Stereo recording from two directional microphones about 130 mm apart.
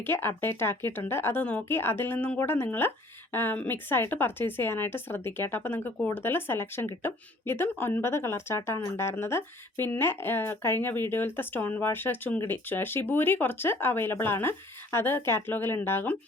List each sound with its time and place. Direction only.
0.0 s speech: 15° left (ahead or behind)